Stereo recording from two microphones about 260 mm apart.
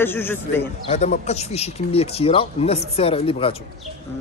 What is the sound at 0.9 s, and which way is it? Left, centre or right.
Speech, left.